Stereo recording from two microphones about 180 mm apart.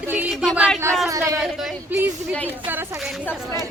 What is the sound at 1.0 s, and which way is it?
Speech, 15° right (ahead or behind).